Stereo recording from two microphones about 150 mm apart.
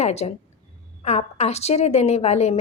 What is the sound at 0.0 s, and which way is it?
A woman's voice, 45° left (ahead or behind).